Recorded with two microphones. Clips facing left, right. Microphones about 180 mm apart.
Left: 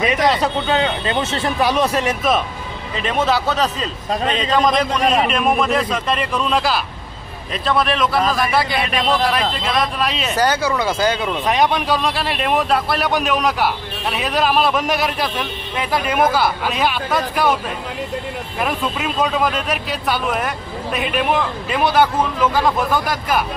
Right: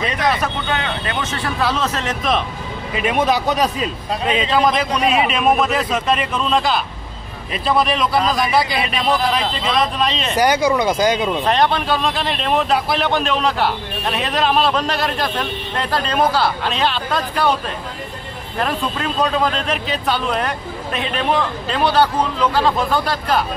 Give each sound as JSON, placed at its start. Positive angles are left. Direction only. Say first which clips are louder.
{"t": 0.0, "sound": "speech", "louder": "left 3 dB", "side_deg": 15}
{"t": 1.6, "sound": "speech", "louder": "left 4 dB", "side_deg": 15}
{"t": 2.9, "sound": "a man's voice", "louder": "right 1 dB", "side_deg": -10}
{"t": 10.4, "sound": "speech", "louder": "right 3 dB", "side_deg": -15}
{"t": 11.4, "sound": "a man's voice", "louder": "left 2 dB", "side_deg": 10}
{"t": 18.6, "sound": "speech", "louder": "right 1 dB", "side_deg": 10}